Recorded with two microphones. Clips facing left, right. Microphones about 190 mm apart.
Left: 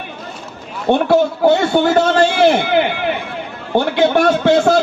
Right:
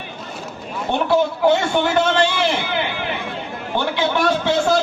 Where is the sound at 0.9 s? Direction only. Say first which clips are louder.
Left 7 dB; 55° left (ahead or behind).